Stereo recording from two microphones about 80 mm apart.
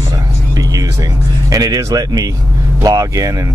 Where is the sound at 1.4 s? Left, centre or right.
Right.